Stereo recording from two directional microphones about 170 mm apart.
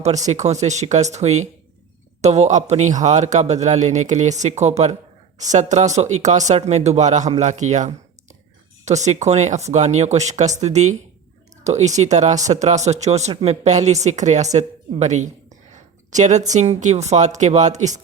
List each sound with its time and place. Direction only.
0.3 s a man's voice: 45° right (ahead or behind)
15.7 s a sound: 45° right (ahead or behind)
16.5 s a man's voice: 45° right (ahead or behind)